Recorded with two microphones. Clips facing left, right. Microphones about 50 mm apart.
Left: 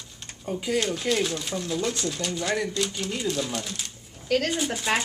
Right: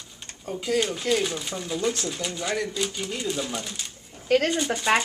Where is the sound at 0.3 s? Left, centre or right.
Centre.